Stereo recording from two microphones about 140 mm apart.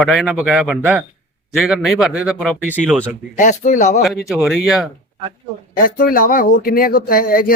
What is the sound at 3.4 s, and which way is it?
Speech, 65° left (ahead or behind).